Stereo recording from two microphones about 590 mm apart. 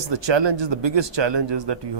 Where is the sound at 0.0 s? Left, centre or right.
Right.